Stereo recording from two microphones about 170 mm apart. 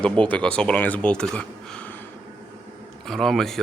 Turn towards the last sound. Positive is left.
turn(degrees=0)  # may be behind; listen again after turning